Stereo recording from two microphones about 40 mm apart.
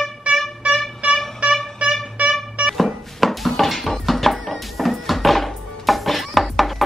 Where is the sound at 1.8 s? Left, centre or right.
Right.